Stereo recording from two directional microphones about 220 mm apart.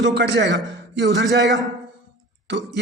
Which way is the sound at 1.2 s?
Centre (ahead or behind).